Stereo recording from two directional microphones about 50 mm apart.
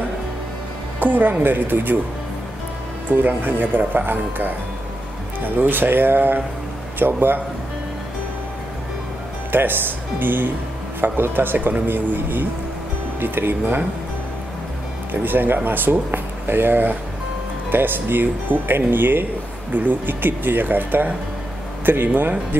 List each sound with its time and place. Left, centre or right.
0.9 s a woman's voice: right
3.1 s speech: right
9.5 s speech: right
15.2 s speech: right